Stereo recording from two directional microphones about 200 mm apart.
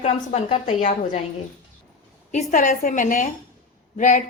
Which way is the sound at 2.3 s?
35° left (ahead or behind).